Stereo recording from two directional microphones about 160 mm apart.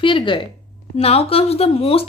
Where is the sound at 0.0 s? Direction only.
30° left (ahead or behind).